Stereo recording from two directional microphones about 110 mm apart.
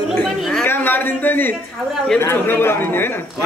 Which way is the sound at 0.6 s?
15° left (ahead or behind).